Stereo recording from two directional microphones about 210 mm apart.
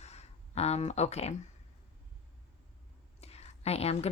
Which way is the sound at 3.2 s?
30° left (ahead or behind).